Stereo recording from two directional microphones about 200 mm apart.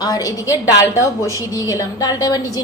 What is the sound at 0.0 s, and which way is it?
A woman's voice, 20° left (ahead or behind).